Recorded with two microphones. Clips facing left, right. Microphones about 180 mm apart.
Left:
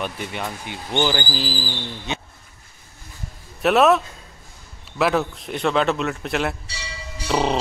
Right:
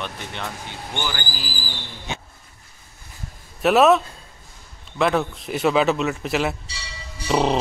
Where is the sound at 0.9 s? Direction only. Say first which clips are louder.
Left 8 dB; 25° left (ahead or behind).